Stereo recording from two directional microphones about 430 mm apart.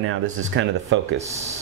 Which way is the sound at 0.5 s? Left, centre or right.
Right.